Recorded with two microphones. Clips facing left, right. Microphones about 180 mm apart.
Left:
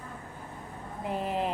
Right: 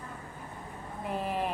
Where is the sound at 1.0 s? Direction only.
20° left (ahead or behind).